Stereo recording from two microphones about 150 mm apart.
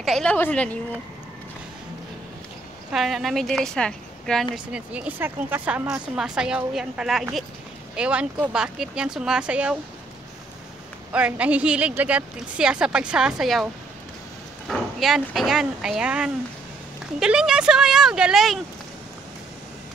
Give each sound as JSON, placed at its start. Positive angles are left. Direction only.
{"t": 0.0, "sound": "a woman's voice", "side_deg": 5}
{"t": 2.9, "sound": "a woman's voice", "side_deg": 0}
{"t": 4.7, "sound": "a woman's voice", "side_deg": -10}
{"t": 11.1, "sound": "a woman's voice", "side_deg": -10}
{"t": 14.7, "sound": "a woman's voice", "side_deg": 0}